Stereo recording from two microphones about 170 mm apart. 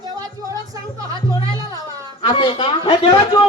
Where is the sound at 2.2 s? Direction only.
30° left (ahead or behind).